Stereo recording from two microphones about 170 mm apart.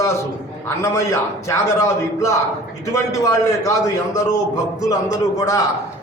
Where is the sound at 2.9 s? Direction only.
20° left (ahead or behind).